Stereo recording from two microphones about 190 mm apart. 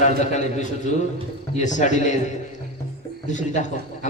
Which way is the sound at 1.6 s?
40° left (ahead or behind).